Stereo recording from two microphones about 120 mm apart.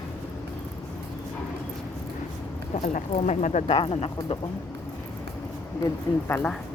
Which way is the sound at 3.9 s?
50° left (ahead or behind).